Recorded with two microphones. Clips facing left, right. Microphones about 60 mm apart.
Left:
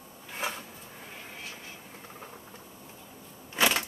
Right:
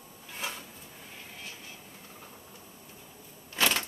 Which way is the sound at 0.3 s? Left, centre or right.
Left.